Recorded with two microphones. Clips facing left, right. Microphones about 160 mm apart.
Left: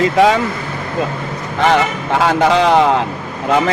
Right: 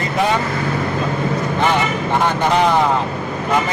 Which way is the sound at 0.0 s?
90° left.